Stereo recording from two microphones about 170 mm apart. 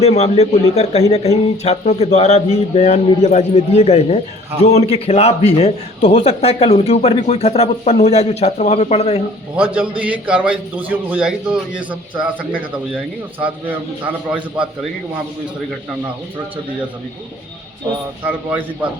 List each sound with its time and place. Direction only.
0.0 s a man's voice: 40° left (ahead or behind)
10.0 s a man's voice: 10° right (ahead or behind)
14.3 s a man's voice: 10° right (ahead or behind)
18.3 s a man's voice: 10° right (ahead or behind)